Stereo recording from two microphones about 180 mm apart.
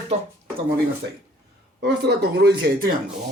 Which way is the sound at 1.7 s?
70° right (ahead or behind).